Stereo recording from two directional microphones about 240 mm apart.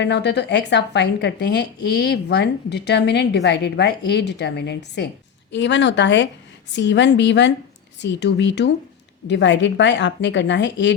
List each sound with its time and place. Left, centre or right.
0.0 s a woman's voice: left